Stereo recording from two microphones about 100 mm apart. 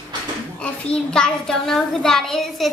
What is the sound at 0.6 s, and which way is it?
A child's voice, 10° left (ahead or behind).